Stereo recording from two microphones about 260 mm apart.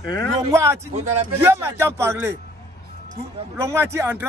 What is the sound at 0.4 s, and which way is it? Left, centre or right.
A man's voice, centre.